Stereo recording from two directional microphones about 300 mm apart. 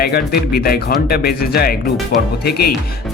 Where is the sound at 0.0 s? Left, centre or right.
Left.